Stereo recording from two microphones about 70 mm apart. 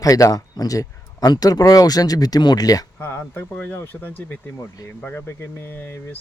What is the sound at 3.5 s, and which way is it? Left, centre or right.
Speech, left.